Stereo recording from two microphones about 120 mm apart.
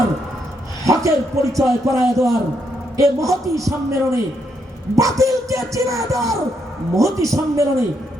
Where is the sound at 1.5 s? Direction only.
25° right (ahead or behind).